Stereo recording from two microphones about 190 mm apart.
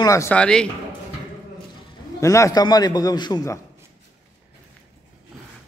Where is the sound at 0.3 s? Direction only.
5° left (ahead or behind).